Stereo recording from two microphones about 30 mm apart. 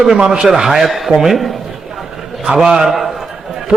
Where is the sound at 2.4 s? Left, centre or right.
Centre.